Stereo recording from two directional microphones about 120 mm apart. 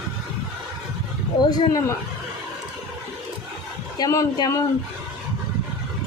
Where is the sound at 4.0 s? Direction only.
30° left (ahead or behind).